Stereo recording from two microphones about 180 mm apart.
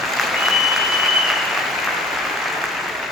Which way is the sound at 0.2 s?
Centre (ahead or behind).